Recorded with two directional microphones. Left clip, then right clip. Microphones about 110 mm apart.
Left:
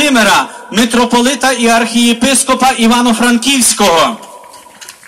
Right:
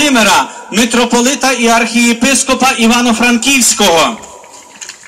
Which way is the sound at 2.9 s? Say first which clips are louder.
Even; 15° right (ahead or behind).